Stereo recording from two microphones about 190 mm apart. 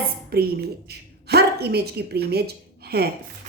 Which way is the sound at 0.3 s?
55° right (ahead or behind).